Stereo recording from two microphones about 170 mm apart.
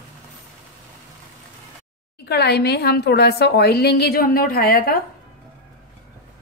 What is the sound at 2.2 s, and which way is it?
A woman's voice, 75° left (ahead or behind).